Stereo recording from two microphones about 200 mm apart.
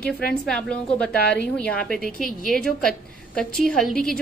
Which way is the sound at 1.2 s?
55° left (ahead or behind).